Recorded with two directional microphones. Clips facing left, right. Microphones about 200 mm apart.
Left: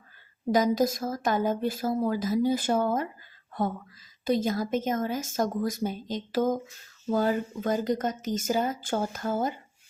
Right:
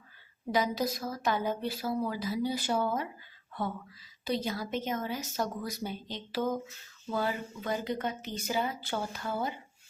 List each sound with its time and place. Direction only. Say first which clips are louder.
0.5 s a woman's voice: left 6 dB; 45° left (ahead or behind)
4.3 s a woman's voice: left 7 dB; 50° left (ahead or behind)